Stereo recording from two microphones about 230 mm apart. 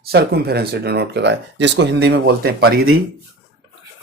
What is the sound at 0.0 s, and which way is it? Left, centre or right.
Speech, right.